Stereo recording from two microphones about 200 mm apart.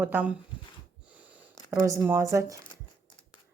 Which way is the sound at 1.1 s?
5° right (ahead or behind).